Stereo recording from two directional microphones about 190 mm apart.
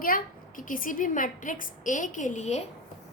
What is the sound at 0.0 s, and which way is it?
A woman's voice, 45° left (ahead or behind).